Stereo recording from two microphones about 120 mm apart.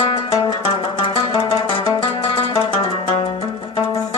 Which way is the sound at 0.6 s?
50° left (ahead or behind).